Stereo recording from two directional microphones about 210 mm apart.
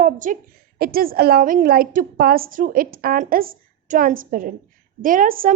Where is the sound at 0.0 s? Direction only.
40° right (ahead or behind).